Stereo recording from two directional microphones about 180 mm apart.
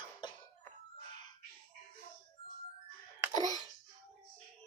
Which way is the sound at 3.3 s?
20° left (ahead or behind).